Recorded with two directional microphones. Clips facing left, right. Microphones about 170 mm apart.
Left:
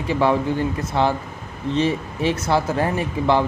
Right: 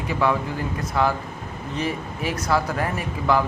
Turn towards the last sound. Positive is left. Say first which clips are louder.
# left 3 dB
turn(degrees=25)  # may be behind; listen again after turning